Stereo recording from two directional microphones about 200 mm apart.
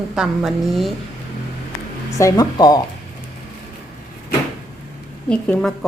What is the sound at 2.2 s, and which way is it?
Speech, 20° left (ahead or behind).